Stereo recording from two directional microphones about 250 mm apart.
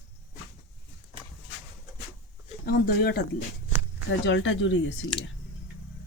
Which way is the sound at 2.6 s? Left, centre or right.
Left.